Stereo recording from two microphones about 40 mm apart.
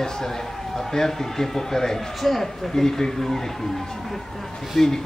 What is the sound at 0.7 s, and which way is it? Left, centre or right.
Speech, centre.